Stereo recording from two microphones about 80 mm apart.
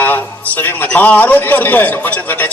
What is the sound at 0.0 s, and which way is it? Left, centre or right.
A man's voice, left.